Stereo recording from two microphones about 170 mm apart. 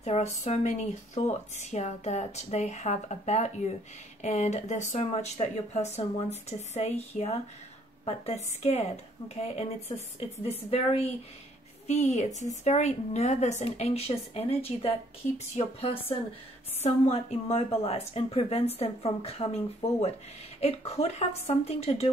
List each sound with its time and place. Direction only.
0.0 s a woman's voice: 40° left (ahead or behind)
20.6 s speech: 35° left (ahead or behind)